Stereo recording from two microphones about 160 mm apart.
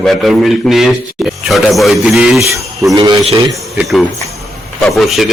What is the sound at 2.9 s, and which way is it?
Speech, 25° right (ahead or behind).